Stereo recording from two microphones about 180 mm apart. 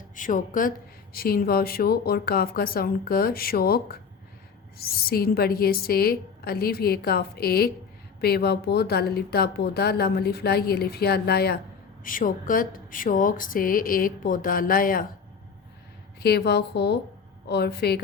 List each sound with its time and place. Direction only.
0.2 s a woman's voice: 45° left (ahead or behind)
12.0 s a woman's voice: 50° left (ahead or behind)
16.2 s speech: 65° left (ahead or behind)